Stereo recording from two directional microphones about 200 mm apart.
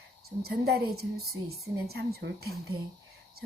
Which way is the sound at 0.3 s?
50° right (ahead or behind).